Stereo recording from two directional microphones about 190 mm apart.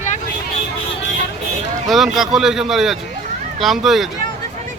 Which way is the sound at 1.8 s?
Centre (ahead or behind).